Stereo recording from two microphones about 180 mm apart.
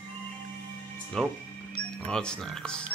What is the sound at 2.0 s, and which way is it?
Speech, 5° left (ahead or behind).